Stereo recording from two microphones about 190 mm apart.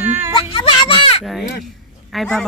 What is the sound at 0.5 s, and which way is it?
Speech, 25° left (ahead or behind).